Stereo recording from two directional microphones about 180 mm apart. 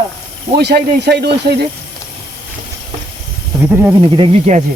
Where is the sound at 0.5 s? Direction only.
65° right (ahead or behind).